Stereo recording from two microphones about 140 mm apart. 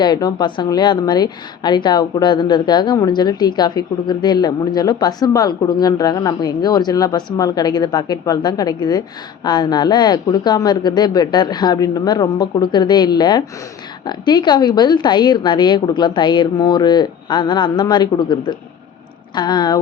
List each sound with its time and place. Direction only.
0.0 s a woman's voice: 30° left (ahead or behind)